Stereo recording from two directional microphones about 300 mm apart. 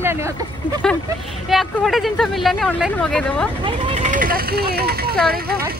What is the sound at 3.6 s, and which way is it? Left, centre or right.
Speech, centre.